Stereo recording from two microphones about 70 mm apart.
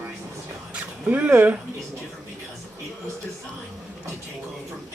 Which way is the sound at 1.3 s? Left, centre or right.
Right.